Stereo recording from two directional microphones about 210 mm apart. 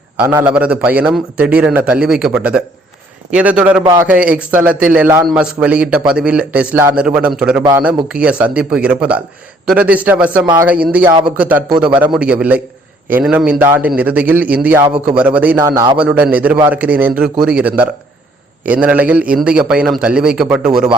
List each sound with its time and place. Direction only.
0.2 s a man's voice: 10° right (ahead or behind)
10.4 s speech: 20° right (ahead or behind)
10.7 s a man's voice: 5° right (ahead or behind)
11.1 s speech: 20° right (ahead or behind)
11.3 s a man's voice: 10° right (ahead or behind)
16.0 s a man's voice: 5° right (ahead or behind)